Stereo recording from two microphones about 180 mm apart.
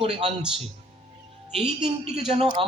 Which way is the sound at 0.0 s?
35° right (ahead or behind).